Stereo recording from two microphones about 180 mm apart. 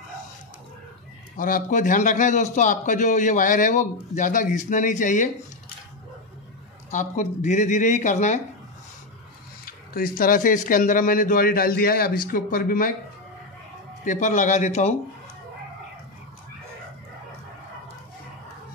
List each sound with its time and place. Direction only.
1.3 s a man's voice: 50° left (ahead or behind)
6.9 s a man's voice: 45° left (ahead or behind)
9.7 s a man's voice: 55° left (ahead or behind)
14.0 s a man's voice: 45° left (ahead or behind)